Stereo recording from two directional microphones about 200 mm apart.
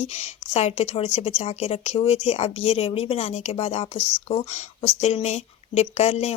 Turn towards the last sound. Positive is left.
turn(degrees=35)  # may be behind; listen again after turning